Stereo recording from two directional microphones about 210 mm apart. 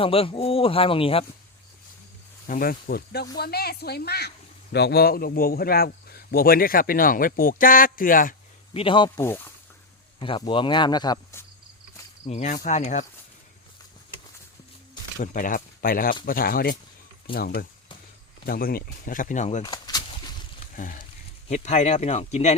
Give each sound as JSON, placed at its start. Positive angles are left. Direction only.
{"t": 0.0, "sound": "speech", "side_deg": 25}
{"t": 2.5, "sound": "a man's voice", "side_deg": 40}
{"t": 8.7, "sound": "speech", "side_deg": 25}
{"t": 9.0, "sound": "speech", "side_deg": 10}
{"t": 10.2, "sound": "speech", "side_deg": 25}
{"t": 12.2, "sound": "speech", "side_deg": 35}
{"t": 15.2, "sound": "a man's voice", "side_deg": 40}
{"t": 19.6, "sound": "a sound", "side_deg": 20}
{"t": 20.7, "sound": "speech", "side_deg": 40}